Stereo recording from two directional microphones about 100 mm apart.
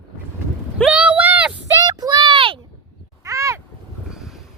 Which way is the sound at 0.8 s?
15° right (ahead or behind).